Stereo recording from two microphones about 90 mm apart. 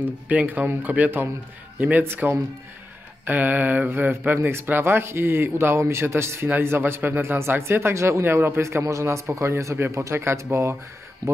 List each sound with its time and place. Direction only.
0.3 s speech: 20° right (ahead or behind)